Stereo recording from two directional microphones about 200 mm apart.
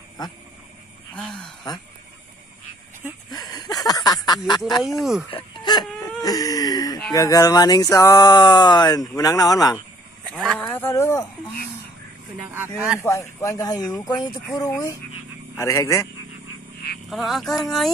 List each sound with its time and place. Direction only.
1.1 s speech: 5° left (ahead or behind)
3.3 s a sound: 20° left (ahead or behind)
3.8 s speech: 20° left (ahead or behind)
4.7 s speech: centre (ahead or behind)
5.3 s whimper: 25° left (ahead or behind)
7.1 s speech: 15° left (ahead or behind)
10.3 s speech: centre (ahead or behind)
12.4 s speech: 10° right (ahead or behind)
13.0 s speech: 15° left (ahead or behind)
17.1 s speech: centre (ahead or behind)